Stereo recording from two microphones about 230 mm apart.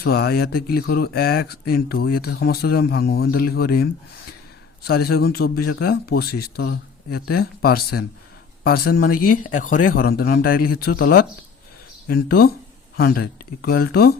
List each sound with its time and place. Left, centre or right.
0.0 s speech: left
4.9 s speech: left